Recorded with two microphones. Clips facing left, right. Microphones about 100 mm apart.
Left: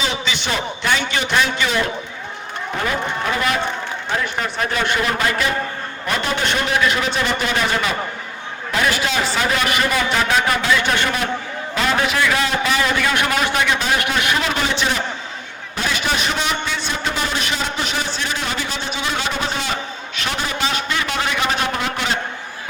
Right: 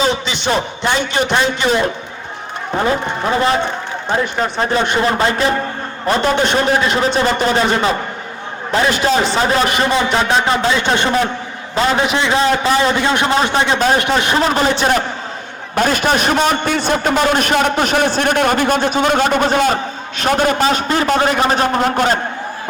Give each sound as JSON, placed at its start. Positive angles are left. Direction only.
{"t": 0.8, "sound": "a man's voice", "side_deg": -25}